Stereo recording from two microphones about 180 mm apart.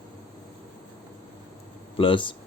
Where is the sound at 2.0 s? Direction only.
30° left (ahead or behind).